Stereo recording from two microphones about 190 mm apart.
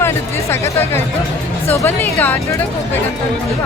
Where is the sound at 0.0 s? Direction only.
15° left (ahead or behind).